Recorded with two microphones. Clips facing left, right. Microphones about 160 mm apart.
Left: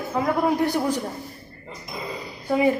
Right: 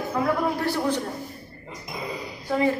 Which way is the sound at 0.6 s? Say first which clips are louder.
Left 2 dB; 15° left (ahead or behind).